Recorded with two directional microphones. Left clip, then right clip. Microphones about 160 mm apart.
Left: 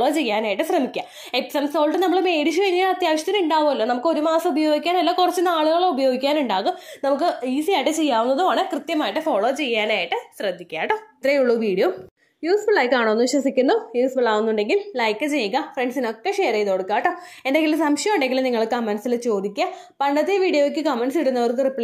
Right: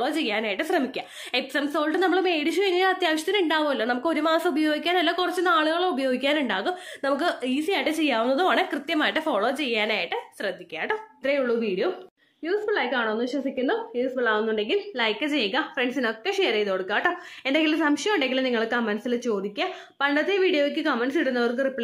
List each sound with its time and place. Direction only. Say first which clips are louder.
0.0 s a woman's voice: left 5 dB; 25° left (ahead or behind)
8.3 s a woman's voice: left 3 dB; centre (ahead or behind); by 11.9 s 35° left (ahead or behind)
12.4 s a woman's voice: left 7 dB; 25° left (ahead or behind)
12.8 s a woman's voice: left 7 dB; 40° left (ahead or behind); by 21.8 s 15° left (ahead or behind)